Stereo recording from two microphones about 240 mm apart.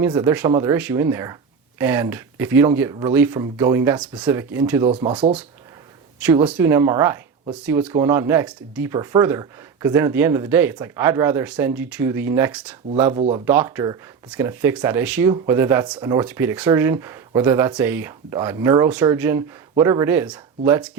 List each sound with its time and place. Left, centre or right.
0.0 s speech: centre
4.9 s speech: right
6.4 s speech: centre
13.1 s speech: right
13.4 s speech: centre